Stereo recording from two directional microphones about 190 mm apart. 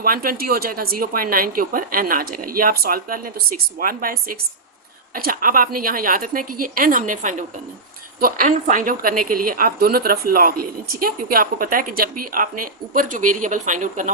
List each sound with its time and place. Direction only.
0.0 s a woman's voice: 50° right (ahead or behind)